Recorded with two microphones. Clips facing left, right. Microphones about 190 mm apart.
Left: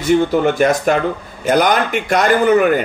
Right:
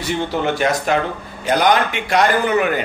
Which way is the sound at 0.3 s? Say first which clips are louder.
Left 5 dB; 50° left (ahead or behind).